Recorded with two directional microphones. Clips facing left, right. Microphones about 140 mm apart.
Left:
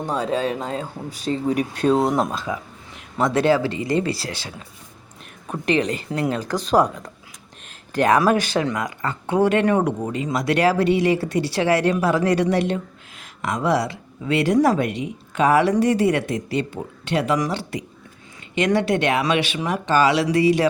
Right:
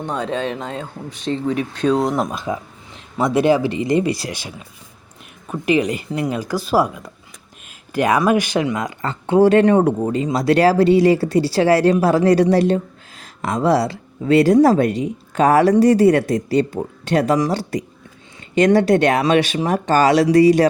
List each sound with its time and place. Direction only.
0.2 s speech: 35° left (ahead or behind)
1.5 s speech: 10° left (ahead or behind)
2.3 s speech: 20° right (ahead or behind); by 20.7 s 40° right (ahead or behind)